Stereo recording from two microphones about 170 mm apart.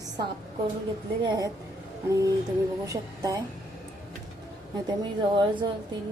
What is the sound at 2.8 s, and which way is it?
Speech, 20° right (ahead or behind).